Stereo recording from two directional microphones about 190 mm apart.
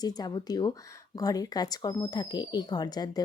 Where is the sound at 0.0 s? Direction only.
20° left (ahead or behind).